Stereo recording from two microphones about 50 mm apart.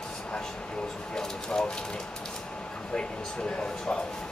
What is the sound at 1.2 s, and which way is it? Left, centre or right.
Speech, centre.